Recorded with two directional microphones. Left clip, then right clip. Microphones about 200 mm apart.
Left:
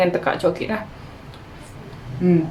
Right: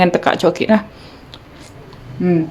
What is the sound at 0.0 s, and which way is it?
Speech, 50° right (ahead or behind).